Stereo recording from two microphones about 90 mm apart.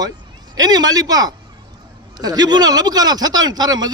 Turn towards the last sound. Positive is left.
turn(degrees=-50)  # may be behind; listen again after turning